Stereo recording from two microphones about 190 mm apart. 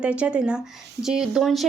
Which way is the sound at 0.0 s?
5° right (ahead or behind).